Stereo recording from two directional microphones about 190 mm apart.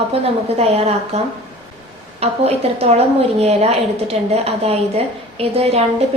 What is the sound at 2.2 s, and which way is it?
A woman's voice, 35° right (ahead or behind).